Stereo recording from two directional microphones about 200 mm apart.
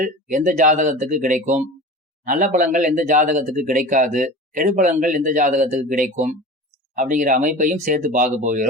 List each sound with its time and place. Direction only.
0.0 s speech: 40° right (ahead or behind)